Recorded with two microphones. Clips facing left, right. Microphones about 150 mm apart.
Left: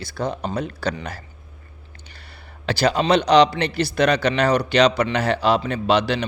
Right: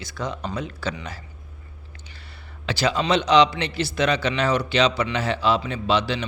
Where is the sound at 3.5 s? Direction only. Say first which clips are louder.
Left 4 dB; 55° left (ahead or behind).